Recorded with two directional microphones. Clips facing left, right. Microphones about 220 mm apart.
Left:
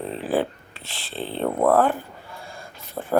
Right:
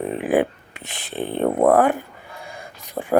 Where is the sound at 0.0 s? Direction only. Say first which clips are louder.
Right 4 dB; 15° right (ahead or behind).